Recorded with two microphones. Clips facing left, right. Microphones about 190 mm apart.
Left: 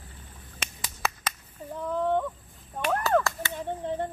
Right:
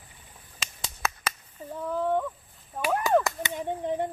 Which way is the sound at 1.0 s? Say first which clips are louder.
Even; 5° right (ahead or behind).